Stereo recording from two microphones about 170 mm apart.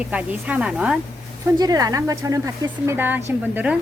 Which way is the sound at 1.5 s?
20° right (ahead or behind).